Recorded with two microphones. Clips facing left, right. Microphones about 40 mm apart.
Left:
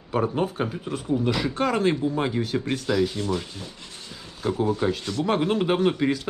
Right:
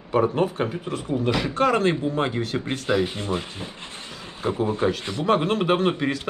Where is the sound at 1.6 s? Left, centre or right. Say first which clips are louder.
Right 5 dB; right.